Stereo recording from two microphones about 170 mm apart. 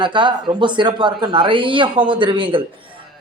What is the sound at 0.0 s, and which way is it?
Speech, 25° right (ahead or behind).